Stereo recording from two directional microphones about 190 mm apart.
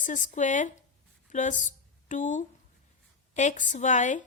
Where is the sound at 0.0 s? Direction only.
40° left (ahead or behind).